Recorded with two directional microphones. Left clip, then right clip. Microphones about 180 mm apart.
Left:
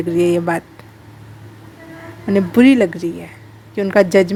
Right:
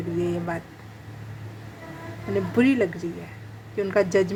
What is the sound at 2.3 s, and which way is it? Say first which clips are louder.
A woman's voice: left 10 dB; 40° left (ahead or behind).